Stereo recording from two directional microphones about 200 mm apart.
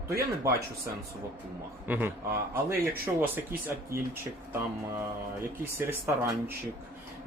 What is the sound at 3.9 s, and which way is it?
Speech, 15° right (ahead or behind).